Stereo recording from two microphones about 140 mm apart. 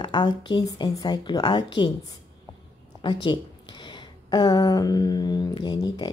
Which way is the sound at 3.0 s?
35° left (ahead or behind).